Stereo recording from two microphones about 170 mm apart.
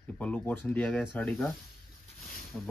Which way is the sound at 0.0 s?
10° left (ahead or behind).